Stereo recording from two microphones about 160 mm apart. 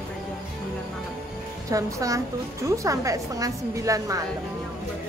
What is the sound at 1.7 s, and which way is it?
A woman's voice, 20° right (ahead or behind).